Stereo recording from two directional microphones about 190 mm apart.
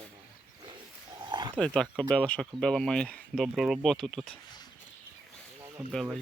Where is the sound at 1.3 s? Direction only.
25° right (ahead or behind).